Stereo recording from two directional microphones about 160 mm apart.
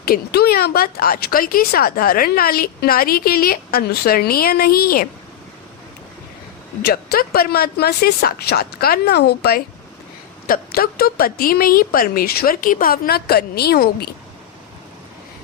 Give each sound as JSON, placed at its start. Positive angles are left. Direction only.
{"t": 0.0, "sound": "speech", "side_deg": 75}
{"t": 6.8, "sound": "speech", "side_deg": 75}